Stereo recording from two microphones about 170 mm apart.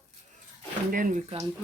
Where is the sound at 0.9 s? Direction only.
55° right (ahead or behind).